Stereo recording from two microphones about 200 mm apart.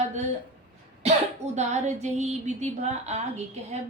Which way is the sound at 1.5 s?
35° right (ahead or behind).